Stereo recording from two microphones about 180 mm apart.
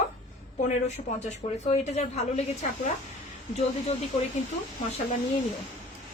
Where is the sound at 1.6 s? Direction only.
35° left (ahead or behind).